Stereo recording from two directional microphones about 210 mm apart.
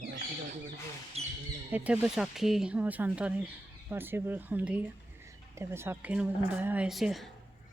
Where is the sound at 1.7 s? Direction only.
10° right (ahead or behind).